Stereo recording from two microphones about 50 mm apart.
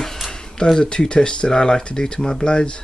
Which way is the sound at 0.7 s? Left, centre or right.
Centre.